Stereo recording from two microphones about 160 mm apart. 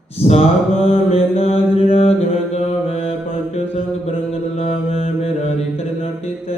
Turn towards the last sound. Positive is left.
turn(degrees=40)  # may be behind; listen again after turning